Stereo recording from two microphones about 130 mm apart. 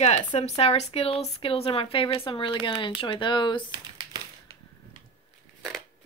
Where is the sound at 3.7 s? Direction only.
35° right (ahead or behind).